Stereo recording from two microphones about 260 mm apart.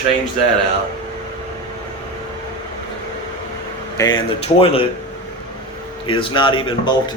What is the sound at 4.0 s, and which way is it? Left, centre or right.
Speech, centre.